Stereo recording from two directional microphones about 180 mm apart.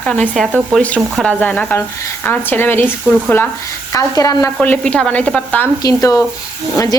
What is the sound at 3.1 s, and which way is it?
Speech, 5° right (ahead or behind).